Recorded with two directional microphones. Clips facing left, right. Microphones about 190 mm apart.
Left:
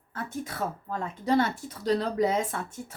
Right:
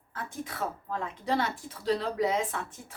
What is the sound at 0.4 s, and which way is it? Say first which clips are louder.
Speech: left 2 dB; 40° left (ahead or behind).